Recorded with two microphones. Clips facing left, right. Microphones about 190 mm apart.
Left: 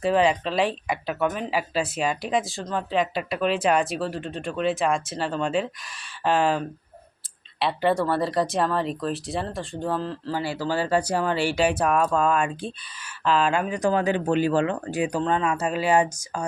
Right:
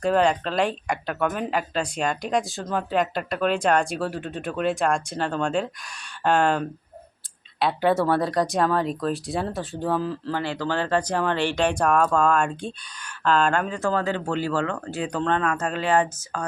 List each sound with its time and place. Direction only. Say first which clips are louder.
0.0 s speech: even; 5° left (ahead or behind)
10.3 s speech: left 1 dB; 10° left (ahead or behind)